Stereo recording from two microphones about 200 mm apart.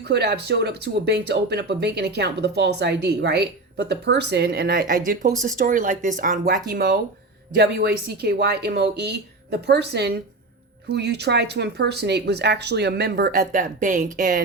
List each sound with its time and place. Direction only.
0.0 s speech: 55° right (ahead or behind)